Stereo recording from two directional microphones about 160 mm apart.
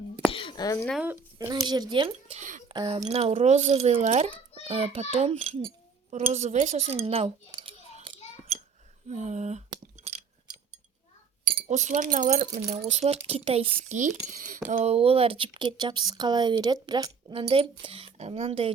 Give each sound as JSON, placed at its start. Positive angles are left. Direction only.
{"t": 0.3, "sound": "a sound", "side_deg": 35}
{"t": 1.1, "sound": "speech", "side_deg": -25}
{"t": 2.4, "sound": "speech", "side_deg": -50}
{"t": 2.6, "sound": "speech", "side_deg": -35}
{"t": 9.0, "sound": "speech", "side_deg": -45}
{"t": 10.0, "sound": "a sound", "side_deg": -45}
{"t": 11.7, "sound": "speech", "side_deg": -50}
{"t": 12.8, "sound": "speech", "side_deg": -40}
{"t": 13.8, "sound": "speech", "side_deg": -50}
{"t": 14.7, "sound": "speech", "side_deg": -45}